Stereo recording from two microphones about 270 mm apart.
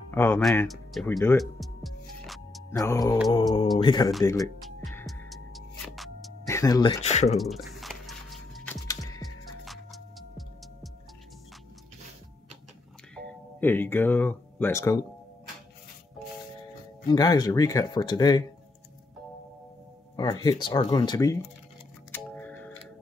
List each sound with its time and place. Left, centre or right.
0.1 s music: centre
2.7 s speech: centre
4.6 s music: centre
6.4 s speech: centre
7.3 s squish: centre
8.8 s music: centre
9.7 s music: centre
13.6 s speech: centre
17.1 s speech: centre
20.2 s speech: centre
22.1 s music: centre